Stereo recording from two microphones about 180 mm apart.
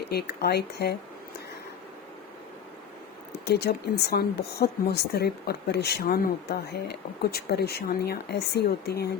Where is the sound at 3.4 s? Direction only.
65° left (ahead or behind).